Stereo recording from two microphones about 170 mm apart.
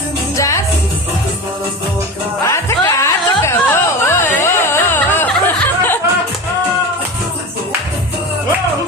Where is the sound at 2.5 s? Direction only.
15° left (ahead or behind).